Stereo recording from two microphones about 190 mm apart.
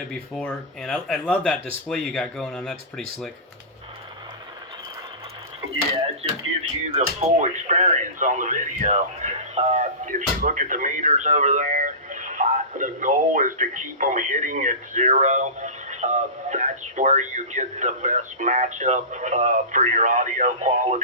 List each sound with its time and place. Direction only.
0.1 s speech: 5° left (ahead or behind)
7.0 s speech: 40° right (ahead or behind)